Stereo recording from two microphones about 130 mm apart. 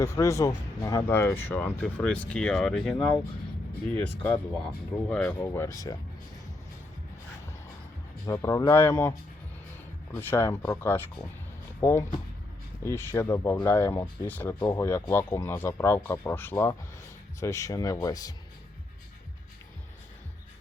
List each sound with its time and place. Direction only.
0.0 s speech: 20° left (ahead or behind); by 5.4 s 5° left (ahead or behind)
5.5 s speech: 25° left (ahead or behind)
8.3 s speech: 25° left (ahead or behind)